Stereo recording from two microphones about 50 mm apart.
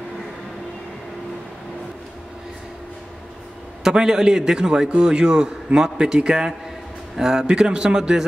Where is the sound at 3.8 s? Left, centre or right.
Centre.